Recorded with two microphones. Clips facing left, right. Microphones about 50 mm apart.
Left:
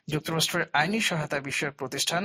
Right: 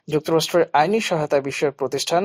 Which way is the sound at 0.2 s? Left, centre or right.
Right.